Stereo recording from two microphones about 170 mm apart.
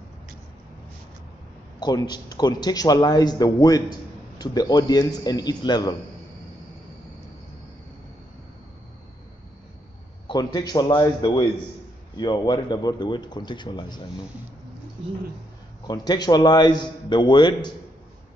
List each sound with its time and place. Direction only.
1.8 s a man's voice: 25° left (ahead or behind)
10.2 s a man's voice: 25° left (ahead or behind)
15.9 s a man's voice: 25° left (ahead or behind)